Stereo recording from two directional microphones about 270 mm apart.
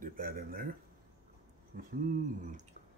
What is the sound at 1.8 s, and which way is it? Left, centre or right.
Speech, right.